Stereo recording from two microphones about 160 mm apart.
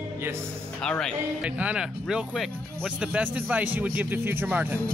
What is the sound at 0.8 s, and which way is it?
Speech, 5° left (ahead or behind).